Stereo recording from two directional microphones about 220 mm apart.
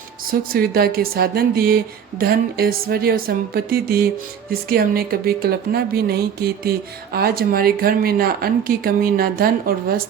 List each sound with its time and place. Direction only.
0.3 s speech: 45° right (ahead or behind)